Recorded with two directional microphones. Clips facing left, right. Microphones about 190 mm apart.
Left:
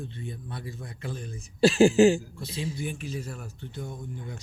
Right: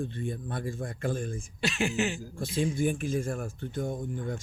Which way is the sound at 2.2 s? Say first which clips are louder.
Right 5 dB; 50° right (ahead or behind).